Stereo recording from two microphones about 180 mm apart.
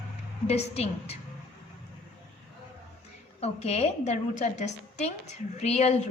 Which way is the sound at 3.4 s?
35° left (ahead or behind).